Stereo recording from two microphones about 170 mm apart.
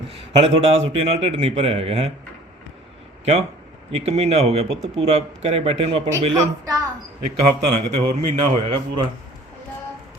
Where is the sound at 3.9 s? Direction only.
40° right (ahead or behind).